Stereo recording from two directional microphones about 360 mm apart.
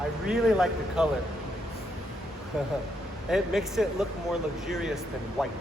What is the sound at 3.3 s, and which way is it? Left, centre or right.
Speech, centre.